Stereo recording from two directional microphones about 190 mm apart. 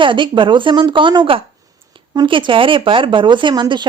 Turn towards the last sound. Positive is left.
turn(degrees=-25)  # may be behind; listen again after turning